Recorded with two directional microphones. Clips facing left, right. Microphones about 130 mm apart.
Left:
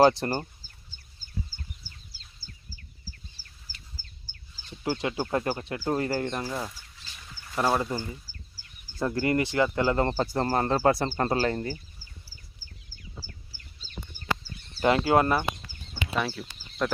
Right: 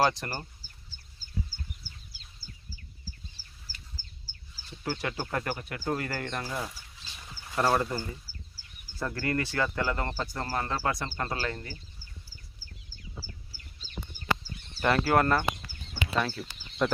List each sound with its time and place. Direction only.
0.0 s speech: 25° left (ahead or behind)
3.4 s duck: 10° left (ahead or behind)
4.0 s bird: 50° left (ahead or behind)
4.8 s speech: 20° left (ahead or behind)
6.3 s speech: 15° left (ahead or behind)
8.5 s a sound: 10° left (ahead or behind)
9.0 s speech: 20° left (ahead or behind)
10.4 s speech: 45° left (ahead or behind)
10.7 s speech: 30° left (ahead or behind)
14.8 s speech: 20° left (ahead or behind)
16.2 s speech: 5° left (ahead or behind)